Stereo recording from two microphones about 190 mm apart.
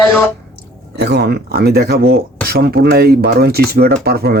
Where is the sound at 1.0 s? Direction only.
60° right (ahead or behind).